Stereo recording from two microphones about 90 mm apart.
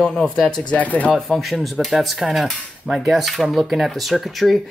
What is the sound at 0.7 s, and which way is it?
Speech, 15° left (ahead or behind).